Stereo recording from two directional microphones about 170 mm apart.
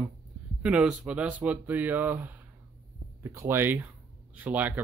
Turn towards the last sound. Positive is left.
turn(degrees=-10)  # may be behind; listen again after turning